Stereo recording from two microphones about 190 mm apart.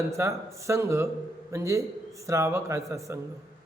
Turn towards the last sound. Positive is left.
turn(degrees=-15)  # may be behind; listen again after turning